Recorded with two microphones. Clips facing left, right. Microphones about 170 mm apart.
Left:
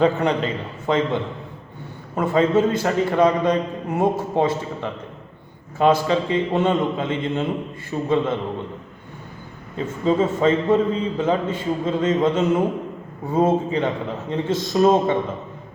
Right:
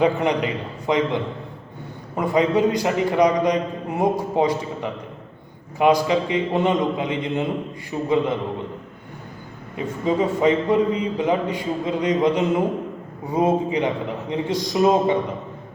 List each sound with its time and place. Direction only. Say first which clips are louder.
0.0 s a man's voice: left 1 dB; 15° right (ahead or behind)
9.7 s a man's voice: left 2 dB; 15° right (ahead or behind)